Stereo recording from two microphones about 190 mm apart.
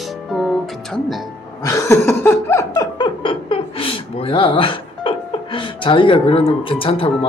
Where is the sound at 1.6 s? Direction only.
15° left (ahead or behind).